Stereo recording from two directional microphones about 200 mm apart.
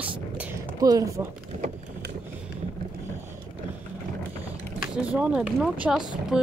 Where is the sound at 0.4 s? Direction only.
15° right (ahead or behind).